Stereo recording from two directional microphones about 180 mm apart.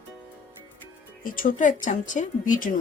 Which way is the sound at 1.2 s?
50° left (ahead or behind).